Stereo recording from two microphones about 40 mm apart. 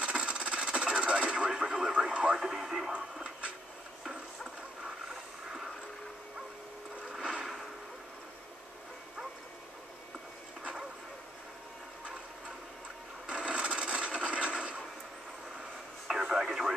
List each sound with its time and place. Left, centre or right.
0.0 s radio: right
2.0 s speech: centre
2.9 s speech: right
7.1 s a sound: centre
13.3 s wood: right
16.1 s radio: centre